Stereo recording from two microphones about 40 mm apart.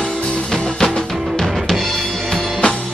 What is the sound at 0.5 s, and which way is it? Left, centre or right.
Music, centre.